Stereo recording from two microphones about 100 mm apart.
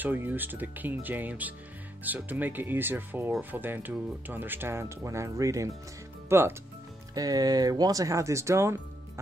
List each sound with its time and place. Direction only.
0.0 s speech: 20° right (ahead or behind)
7.2 s speech: 40° right (ahead or behind)